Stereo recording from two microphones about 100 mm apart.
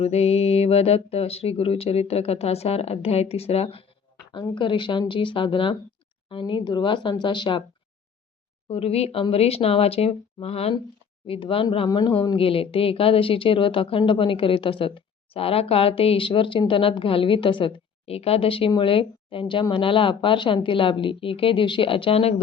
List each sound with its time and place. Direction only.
0.0 s speech: 90° left
4.5 s a woman's voice: 55° left (ahead or behind)
8.7 s speech: 85° left
11.3 s a woman's voice: 60° left (ahead or behind)
11.9 s a woman's voice: 45° left (ahead or behind)
12.4 s a woman's voice: 65° left (ahead or behind)